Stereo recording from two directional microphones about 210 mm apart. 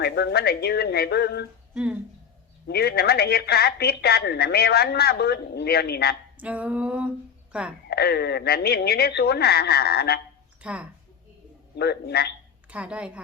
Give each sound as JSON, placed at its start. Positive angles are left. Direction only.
{"t": 0.0, "sound": "a woman's voice", "side_deg": 50}
{"t": 1.7, "sound": "speech", "side_deg": -5}
{"t": 2.6, "sound": "a woman's voice", "side_deg": 50}
{"t": 6.3, "sound": "female singing", "side_deg": -5}
{"t": 7.5, "sound": "a woman's voice", "side_deg": -5}
{"t": 7.9, "sound": "a woman's voice", "side_deg": 50}
{"t": 10.6, "sound": "speech", "side_deg": -5}
{"t": 11.8, "sound": "a woman's voice", "side_deg": 50}
{"t": 12.7, "sound": "a woman's voice", "side_deg": -5}